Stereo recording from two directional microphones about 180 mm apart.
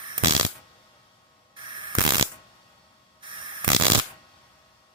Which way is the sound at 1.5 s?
25° right (ahead or behind).